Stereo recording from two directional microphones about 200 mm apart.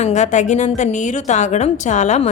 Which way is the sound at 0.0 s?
35° left (ahead or behind).